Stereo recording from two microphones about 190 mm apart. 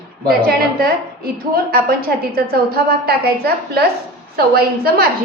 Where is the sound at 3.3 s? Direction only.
55° right (ahead or behind).